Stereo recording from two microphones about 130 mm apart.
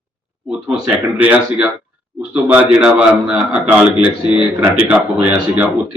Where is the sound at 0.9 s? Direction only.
10° right (ahead or behind).